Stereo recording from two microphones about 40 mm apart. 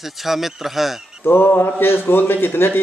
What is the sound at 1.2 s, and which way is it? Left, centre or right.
A man's voice, left.